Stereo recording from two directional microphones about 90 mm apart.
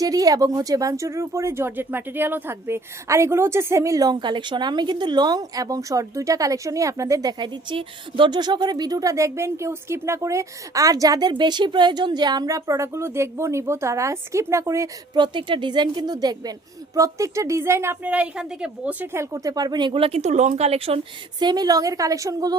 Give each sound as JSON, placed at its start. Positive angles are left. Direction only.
{"t": 0.0, "sound": "speech", "side_deg": -45}
{"t": 15.1, "sound": "speech", "side_deg": -60}
{"t": 18.0, "sound": "a woman's voice", "side_deg": -15}
{"t": 19.1, "sound": "speech", "side_deg": -35}
{"t": 19.9, "sound": "speech", "side_deg": -90}